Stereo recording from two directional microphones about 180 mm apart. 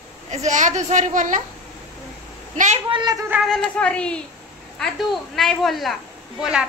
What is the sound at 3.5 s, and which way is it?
Speech, 5° left (ahead or behind).